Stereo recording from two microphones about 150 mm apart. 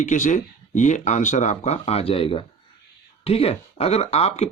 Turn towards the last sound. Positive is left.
turn(degrees=45)  # may be behind; listen again after turning